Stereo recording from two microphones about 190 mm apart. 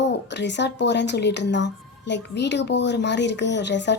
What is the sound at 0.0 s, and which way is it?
A woman's voice, 65° left (ahead or behind).